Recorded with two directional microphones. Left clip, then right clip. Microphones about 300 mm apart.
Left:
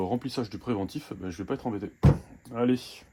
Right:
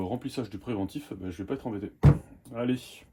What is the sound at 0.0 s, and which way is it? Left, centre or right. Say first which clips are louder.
Speech: left 3 dB; left.